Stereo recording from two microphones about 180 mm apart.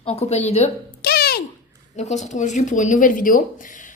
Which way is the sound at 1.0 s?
60° left (ahead or behind).